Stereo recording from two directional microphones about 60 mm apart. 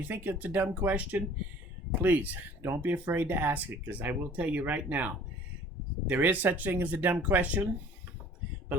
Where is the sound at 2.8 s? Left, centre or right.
Right.